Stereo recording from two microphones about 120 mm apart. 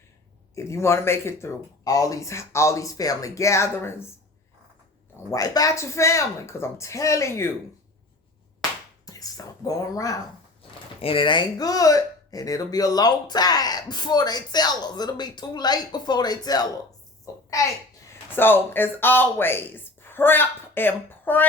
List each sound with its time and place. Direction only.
0.5 s speech: 25° left (ahead or behind)
5.3 s speech: 30° left (ahead or behind)
9.0 s speech: 30° left (ahead or behind)
11.0 s a child's voice: 45° left (ahead or behind); by 17.4 s 30° left (ahead or behind)
18.3 s speech: 20° left (ahead or behind)